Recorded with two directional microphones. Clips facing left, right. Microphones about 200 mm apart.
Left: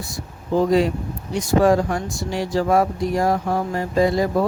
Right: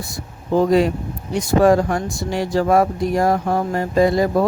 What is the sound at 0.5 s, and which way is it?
Speech, 55° right (ahead or behind).